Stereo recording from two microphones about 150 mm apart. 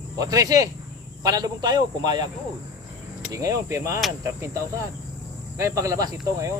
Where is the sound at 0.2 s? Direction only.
25° right (ahead or behind).